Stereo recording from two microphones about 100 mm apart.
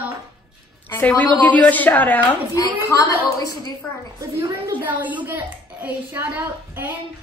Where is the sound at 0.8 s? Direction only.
20° left (ahead or behind).